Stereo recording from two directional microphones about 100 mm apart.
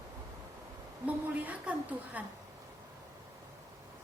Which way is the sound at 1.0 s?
15° right (ahead or behind).